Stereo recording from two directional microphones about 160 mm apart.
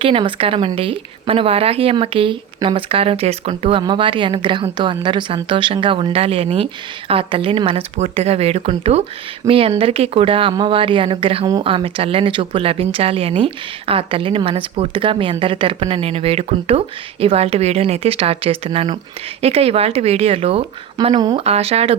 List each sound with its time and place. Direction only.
0.0 s speech: 35° right (ahead or behind)
21.0 s speech: 25° right (ahead or behind)
21.3 s speech: 40° right (ahead or behind)